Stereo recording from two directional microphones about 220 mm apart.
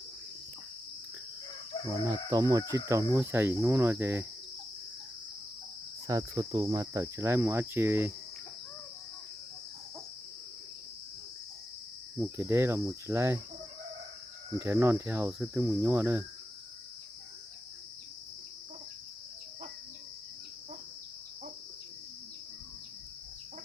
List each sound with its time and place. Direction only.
1.9 s cricket: 15° right (ahead or behind)
6.1 s cricket: 15° right (ahead or behind)
12.1 s cricket: 10° right (ahead or behind)
14.6 s cricket: 10° right (ahead or behind)